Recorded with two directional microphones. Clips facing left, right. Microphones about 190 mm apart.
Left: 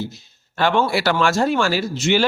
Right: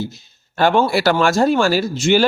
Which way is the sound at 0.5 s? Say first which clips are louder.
Right 3 dB; 45° right (ahead or behind).